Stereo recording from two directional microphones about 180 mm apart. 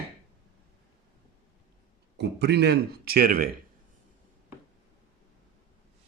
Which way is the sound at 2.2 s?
65° right (ahead or behind).